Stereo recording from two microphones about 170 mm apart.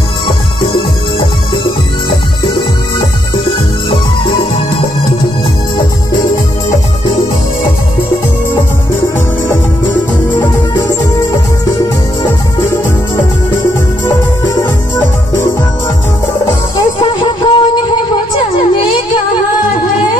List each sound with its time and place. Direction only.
14.0 s music: 20° left (ahead or behind)
16.7 s music: 25° left (ahead or behind)